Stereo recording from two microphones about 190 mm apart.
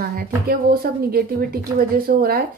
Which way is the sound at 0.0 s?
50° right (ahead or behind).